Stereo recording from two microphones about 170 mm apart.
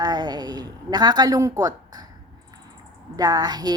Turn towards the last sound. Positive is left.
turn(degrees=-25)  # may be behind; listen again after turning